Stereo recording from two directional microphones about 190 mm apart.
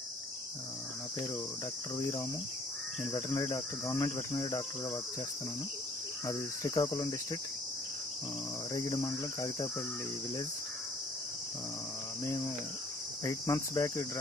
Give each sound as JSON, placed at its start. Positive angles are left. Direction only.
{"t": 3.3, "sound": "speech", "side_deg": 15}
{"t": 6.2, "sound": "cricket", "side_deg": 20}
{"t": 8.7, "sound": "cricket", "side_deg": 20}
{"t": 13.2, "sound": "speech", "side_deg": 15}